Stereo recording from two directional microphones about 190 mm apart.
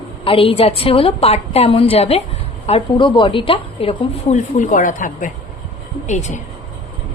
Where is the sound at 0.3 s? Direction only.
30° left (ahead or behind).